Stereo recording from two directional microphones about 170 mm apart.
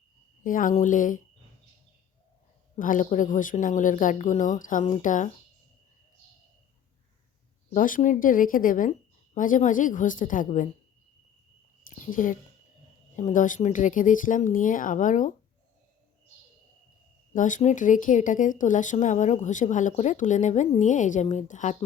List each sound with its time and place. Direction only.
0.4 s speech: 50° left (ahead or behind)
2.7 s speech: 50° left (ahead or behind)
7.7 s speech: 50° left (ahead or behind)
11.9 s speech: 50° left (ahead or behind)
17.3 s speech: 50° left (ahead or behind)